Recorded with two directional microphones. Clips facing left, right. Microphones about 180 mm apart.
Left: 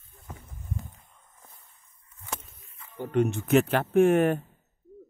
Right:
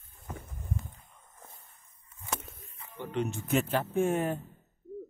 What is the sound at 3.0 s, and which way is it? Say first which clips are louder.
Speech: left 7 dB; 50° left (ahead or behind).